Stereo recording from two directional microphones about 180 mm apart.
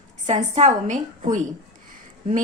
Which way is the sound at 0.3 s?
40° right (ahead or behind).